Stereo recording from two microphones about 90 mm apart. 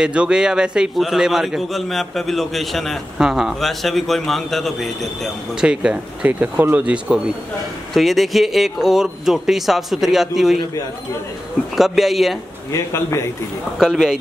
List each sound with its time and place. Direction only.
0.0 s a man's voice: 10° right (ahead or behind)
6.8 s a man's voice: 10° right (ahead or behind)
11.7 s a man's voice: centre (ahead or behind)
12.7 s a man's voice: 35° left (ahead or behind)
13.7 s a man's voice: 5° right (ahead or behind)